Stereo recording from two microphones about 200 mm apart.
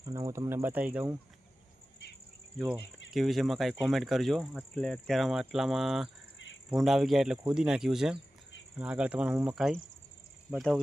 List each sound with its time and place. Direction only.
0.0 s speech: 15° right (ahead or behind)
3.1 s speech: centre (ahead or behind)